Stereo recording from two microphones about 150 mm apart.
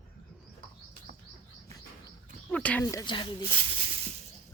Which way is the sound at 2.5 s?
10° left (ahead or behind).